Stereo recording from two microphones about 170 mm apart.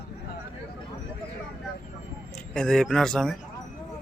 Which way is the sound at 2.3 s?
5° left (ahead or behind).